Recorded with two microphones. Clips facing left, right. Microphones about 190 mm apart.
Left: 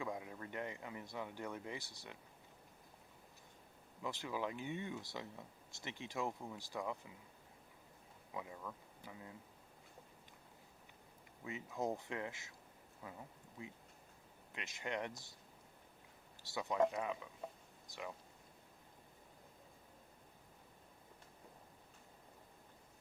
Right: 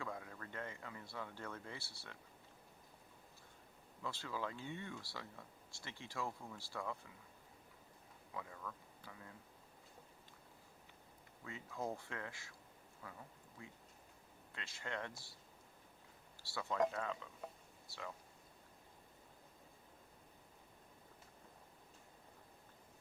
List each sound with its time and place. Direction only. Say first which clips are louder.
0.0 s speech: left 3 dB; 15° left (ahead or behind)
4.0 s speech: left 3 dB; 15° left (ahead or behind)
8.3 s speech: left 2 dB; 15° left (ahead or behind)
11.4 s speech: left 4 dB; 20° left (ahead or behind)
16.4 s speech: left 2 dB; 20° left (ahead or behind)